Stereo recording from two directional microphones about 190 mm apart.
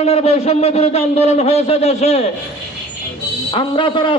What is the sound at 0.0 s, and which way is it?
A man's voice, 35° left (ahead or behind).